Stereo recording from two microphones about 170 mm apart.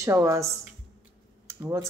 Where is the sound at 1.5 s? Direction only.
15° right (ahead or behind).